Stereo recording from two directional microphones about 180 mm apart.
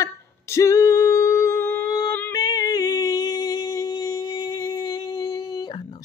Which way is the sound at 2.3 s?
20° left (ahead or behind).